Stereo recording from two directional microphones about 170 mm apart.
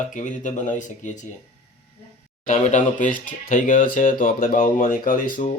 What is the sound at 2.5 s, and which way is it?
Speech, 45° left (ahead or behind).